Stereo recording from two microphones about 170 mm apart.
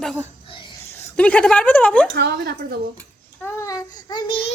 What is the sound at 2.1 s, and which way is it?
Speech, 70° right (ahead or behind).